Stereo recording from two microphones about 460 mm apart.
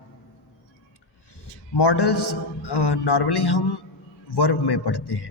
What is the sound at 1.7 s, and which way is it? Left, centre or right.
A man's voice, left.